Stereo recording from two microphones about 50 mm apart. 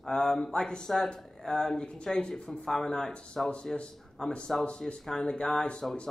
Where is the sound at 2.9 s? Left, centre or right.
Centre.